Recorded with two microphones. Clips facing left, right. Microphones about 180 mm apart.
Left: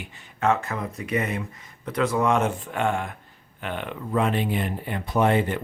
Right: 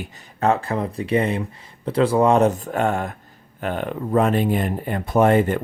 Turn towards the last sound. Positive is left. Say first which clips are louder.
# right 5 dB
turn(degrees=-45)  # may be behind; listen again after turning